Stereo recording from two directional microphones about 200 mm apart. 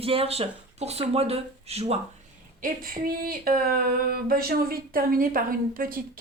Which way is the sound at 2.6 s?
45° right (ahead or behind).